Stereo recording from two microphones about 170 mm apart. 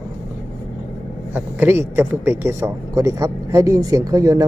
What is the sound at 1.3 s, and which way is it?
Speech, 10° right (ahead or behind).